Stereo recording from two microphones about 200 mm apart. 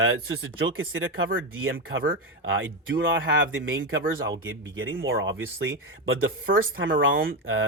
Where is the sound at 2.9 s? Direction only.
60° right (ahead or behind).